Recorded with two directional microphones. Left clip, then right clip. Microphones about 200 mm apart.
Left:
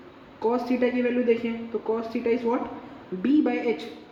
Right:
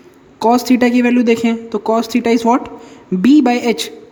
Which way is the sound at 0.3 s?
55° right (ahead or behind).